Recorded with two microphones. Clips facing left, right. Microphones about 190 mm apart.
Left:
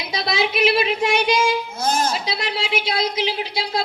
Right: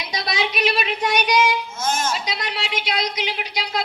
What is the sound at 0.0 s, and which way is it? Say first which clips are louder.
Child singing: left 3 dB; 25° left (ahead or behind).